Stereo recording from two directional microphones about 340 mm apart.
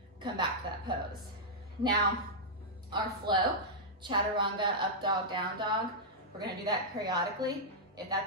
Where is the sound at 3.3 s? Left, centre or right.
Centre.